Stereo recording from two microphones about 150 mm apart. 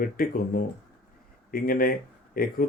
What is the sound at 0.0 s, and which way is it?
Speech, 70° left (ahead or behind).